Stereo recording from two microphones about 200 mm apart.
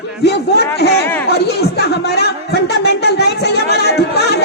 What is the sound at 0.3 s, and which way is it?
Speech, 55° left (ahead or behind).